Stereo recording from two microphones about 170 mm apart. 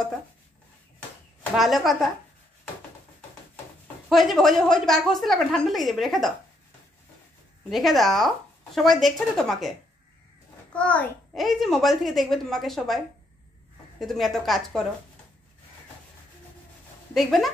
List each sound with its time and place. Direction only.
1.6 s a woman's voice: centre (ahead or behind)
3.8 s a woman's voice: centre (ahead or behind)
7.7 s a woman's voice: centre (ahead or behind)
17.1 s a woman's voice: centre (ahead or behind)